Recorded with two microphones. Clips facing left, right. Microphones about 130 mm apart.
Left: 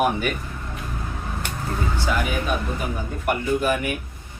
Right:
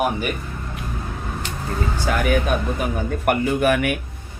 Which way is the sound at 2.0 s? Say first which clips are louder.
Right 5 dB; 55° right (ahead or behind).